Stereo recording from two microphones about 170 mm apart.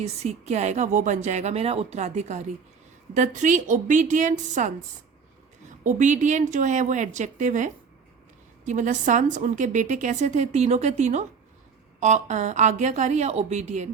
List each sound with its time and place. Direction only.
0.0 s a woman's voice: 40° right (ahead or behind)
5.8 s a woman's voice: 45° right (ahead or behind)